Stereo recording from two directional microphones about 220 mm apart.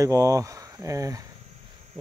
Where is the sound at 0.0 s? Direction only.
15° right (ahead or behind).